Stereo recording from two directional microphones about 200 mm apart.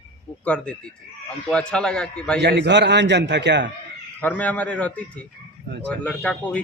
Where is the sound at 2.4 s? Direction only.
55° right (ahead or behind).